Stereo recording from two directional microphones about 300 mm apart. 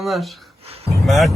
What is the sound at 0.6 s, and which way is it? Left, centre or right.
Speech, centre.